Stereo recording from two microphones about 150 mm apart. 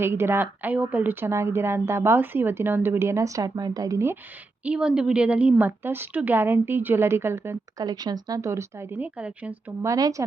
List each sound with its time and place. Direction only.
0.0 s a woman's voice: 15° right (ahead or behind)
4.6 s a woman's voice: 5° right (ahead or behind)
9.9 s speech: 20° right (ahead or behind)